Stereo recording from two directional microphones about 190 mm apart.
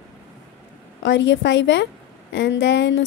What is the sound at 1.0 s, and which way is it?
Speech, 70° left (ahead or behind).